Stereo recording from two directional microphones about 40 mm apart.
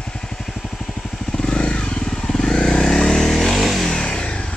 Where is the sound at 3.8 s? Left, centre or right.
Centre.